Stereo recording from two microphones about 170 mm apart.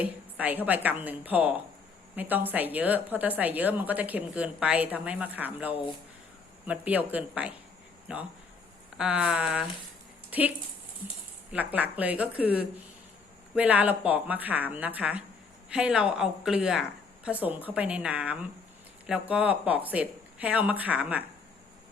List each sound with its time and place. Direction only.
0.0 s a woman's voice: 10° right (ahead or behind)
11.5 s a woman's voice: 10° right (ahead or behind)